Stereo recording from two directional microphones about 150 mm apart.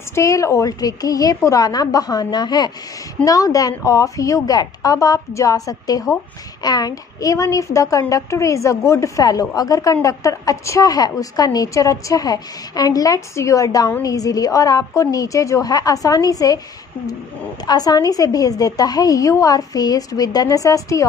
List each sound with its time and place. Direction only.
0.1 s a woman's voice: 20° left (ahead or behind)